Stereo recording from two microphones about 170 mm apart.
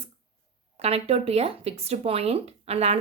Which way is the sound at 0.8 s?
35° right (ahead or behind).